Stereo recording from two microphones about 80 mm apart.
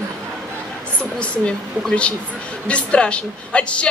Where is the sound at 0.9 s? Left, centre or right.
Centre.